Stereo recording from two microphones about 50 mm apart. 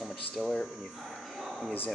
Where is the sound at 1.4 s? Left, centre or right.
Centre.